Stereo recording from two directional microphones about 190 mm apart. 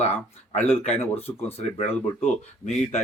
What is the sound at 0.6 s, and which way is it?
Speech, 10° left (ahead or behind).